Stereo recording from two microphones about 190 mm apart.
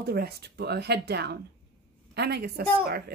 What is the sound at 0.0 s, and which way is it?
Speech, 55° right (ahead or behind).